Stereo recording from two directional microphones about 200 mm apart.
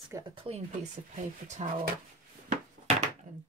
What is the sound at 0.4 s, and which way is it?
Speech, 30° right (ahead or behind).